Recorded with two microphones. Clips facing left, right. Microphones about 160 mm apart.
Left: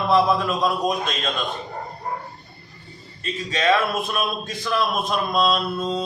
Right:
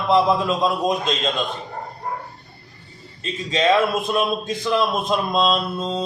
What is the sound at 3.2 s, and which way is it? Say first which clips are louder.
Speech: right 2 dB; 25° right (ahead or behind).